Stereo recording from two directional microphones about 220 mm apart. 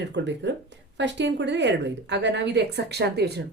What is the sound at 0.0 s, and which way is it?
Speech, 55° right (ahead or behind).